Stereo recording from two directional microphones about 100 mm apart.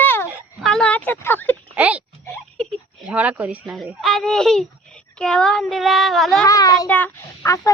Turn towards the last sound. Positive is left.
turn(degrees=35)  # may be behind; listen again after turning